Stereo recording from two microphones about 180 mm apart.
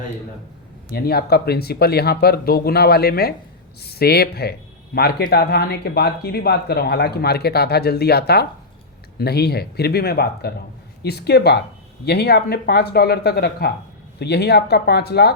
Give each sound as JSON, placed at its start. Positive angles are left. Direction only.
{"t": 0.9, "sound": "speech", "side_deg": 60}